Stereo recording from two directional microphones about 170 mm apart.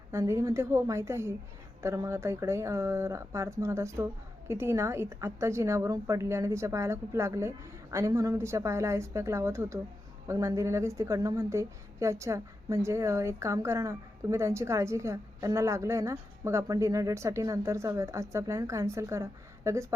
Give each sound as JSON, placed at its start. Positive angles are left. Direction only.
{"t": 0.1, "sound": "a woman's voice", "side_deg": -15}